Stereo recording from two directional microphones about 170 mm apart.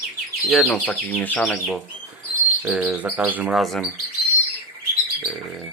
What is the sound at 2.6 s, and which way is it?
Bird, 5° right (ahead or behind).